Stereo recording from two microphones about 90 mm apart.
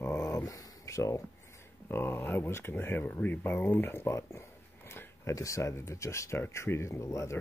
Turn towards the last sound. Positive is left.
turn(degrees=35)  # may be behind; listen again after turning